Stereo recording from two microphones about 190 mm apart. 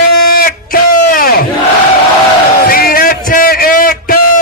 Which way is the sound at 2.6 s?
50° left (ahead or behind).